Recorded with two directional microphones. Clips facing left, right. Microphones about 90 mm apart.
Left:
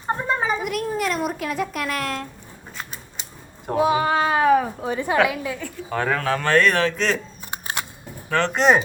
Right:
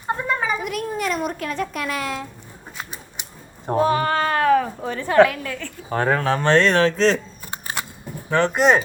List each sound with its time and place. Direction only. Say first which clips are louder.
0.3 s a sound: left 1 dB; 30° left (ahead or behind)
0.6 s speech: left 1 dB; centre (ahead or behind)
2.7 s typewriter: right 1 dB; 15° right (ahead or behind)
3.8 s speech: even; 10° left (ahead or behind)
5.9 s speech: right 3 dB; 35° right (ahead or behind)
8.3 s speech: right 2 dB; 15° right (ahead or behind)
8.5 s speech: even; centre (ahead or behind)